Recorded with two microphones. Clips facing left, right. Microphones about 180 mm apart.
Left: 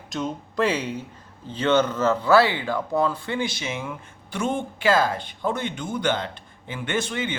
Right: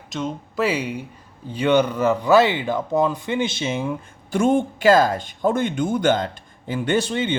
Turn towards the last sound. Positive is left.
turn(degrees=-30)  # may be behind; listen again after turning